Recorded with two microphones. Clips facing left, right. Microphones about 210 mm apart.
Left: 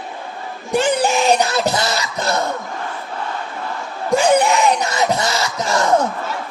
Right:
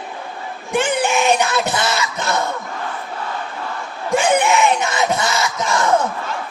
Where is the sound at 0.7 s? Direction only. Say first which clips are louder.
Left 2 dB; 35° left (ahead or behind).